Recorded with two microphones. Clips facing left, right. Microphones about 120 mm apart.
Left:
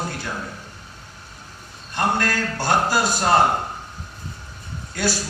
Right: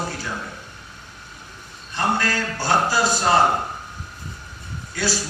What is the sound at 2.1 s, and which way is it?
Speech, 50° left (ahead or behind).